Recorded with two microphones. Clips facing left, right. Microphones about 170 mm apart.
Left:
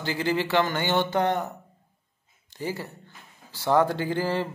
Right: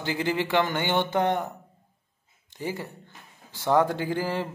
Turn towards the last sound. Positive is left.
turn(degrees=-10)  # may be behind; listen again after turning